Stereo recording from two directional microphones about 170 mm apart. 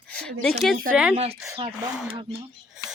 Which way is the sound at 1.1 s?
35° right (ahead or behind).